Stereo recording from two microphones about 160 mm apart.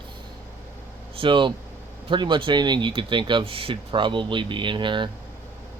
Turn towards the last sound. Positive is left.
turn(degrees=-30)  # may be behind; listen again after turning